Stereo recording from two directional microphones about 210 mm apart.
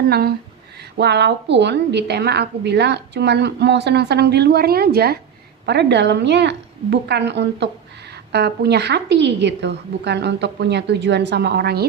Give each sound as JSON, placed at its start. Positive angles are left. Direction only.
{"t": 0.1, "sound": "a woman's voice", "side_deg": -45}